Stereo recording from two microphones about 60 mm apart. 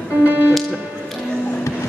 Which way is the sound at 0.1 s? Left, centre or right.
Right.